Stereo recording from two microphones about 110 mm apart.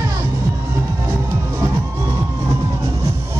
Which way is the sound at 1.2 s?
25° right (ahead or behind).